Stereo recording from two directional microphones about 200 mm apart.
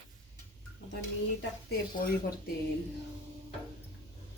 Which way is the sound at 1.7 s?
50° left (ahead or behind).